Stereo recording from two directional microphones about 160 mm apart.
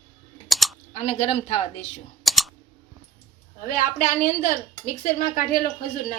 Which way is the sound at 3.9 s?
60° left (ahead or behind).